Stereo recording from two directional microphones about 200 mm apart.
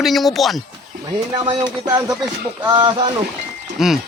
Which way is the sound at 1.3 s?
25° right (ahead or behind).